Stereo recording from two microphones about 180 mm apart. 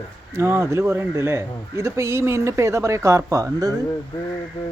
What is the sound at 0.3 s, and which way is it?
Speech, 15° right (ahead or behind).